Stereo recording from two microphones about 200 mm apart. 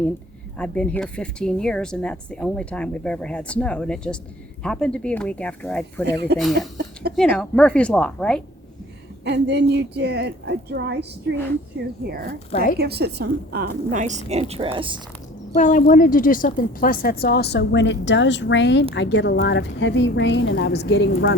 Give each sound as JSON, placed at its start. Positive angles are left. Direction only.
{"t": 0.5, "sound": "speech", "side_deg": 5}
{"t": 6.3, "sound": "a woman's voice", "side_deg": -55}
{"t": 7.2, "sound": "speech", "side_deg": 5}
{"t": 9.2, "sound": "a woman's voice", "side_deg": -55}
{"t": 15.5, "sound": "a woman's voice", "side_deg": 40}